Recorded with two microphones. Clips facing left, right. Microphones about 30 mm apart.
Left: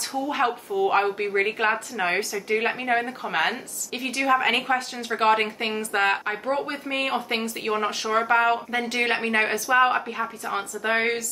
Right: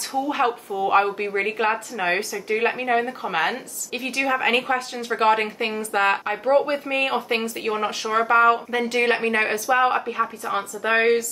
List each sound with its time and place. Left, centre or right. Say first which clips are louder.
0.7 s speech: right 2 dB; centre
6.4 s speech: right 7 dB; centre
6.9 s speech: right 3 dB; centre